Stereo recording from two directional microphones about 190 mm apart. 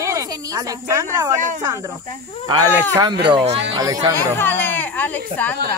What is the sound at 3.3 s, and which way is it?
Speech, 35° right (ahead or behind).